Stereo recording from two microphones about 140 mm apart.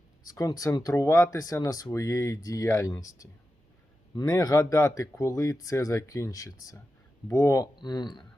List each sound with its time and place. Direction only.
0.3 s speech: 25° left (ahead or behind)